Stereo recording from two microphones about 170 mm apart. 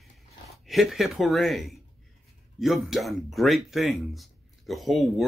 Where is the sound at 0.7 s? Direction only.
Centre (ahead or behind).